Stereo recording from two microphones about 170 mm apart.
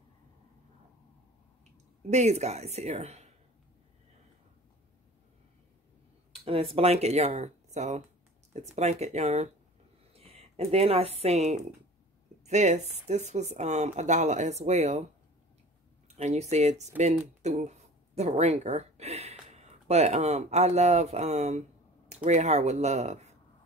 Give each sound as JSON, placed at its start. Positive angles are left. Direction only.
{"t": 2.0, "sound": "speech", "side_deg": -40}
{"t": 6.4, "sound": "speech", "side_deg": -35}
{"t": 16.2, "sound": "speech", "side_deg": -40}